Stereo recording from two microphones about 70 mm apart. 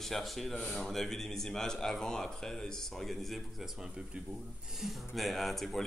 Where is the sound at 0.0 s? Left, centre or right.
Centre.